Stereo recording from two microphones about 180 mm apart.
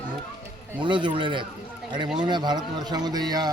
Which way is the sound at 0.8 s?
25° right (ahead or behind).